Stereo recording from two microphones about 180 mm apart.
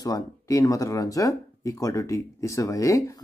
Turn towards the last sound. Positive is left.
turn(degrees=20)  # may be behind; listen again after turning